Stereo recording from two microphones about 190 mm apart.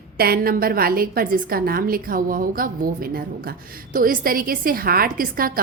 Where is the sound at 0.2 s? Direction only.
50° right (ahead or behind).